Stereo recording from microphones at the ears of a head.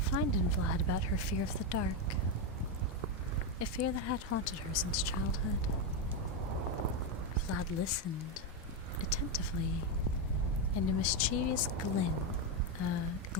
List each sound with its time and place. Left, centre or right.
0.1 s speech: left
3.6 s speech: left
7.4 s speech: left